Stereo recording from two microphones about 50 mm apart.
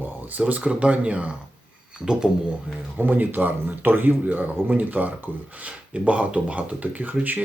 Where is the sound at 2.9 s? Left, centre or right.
Right.